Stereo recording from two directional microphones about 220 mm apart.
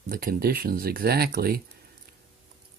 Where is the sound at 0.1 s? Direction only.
40° right (ahead or behind).